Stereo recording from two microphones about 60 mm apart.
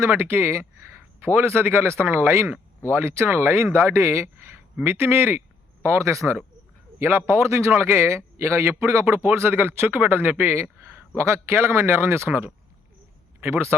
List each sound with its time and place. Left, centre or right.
0.1 s speech: right
4.8 s speech: right
5.8 s speech: right
7.0 s speech: right